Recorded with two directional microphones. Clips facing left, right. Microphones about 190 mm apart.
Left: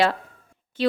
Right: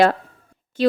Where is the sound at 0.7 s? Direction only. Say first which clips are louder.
Right 4 dB; 45° right (ahead or behind).